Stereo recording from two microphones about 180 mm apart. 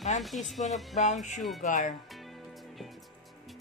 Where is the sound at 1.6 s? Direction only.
45° left (ahead or behind).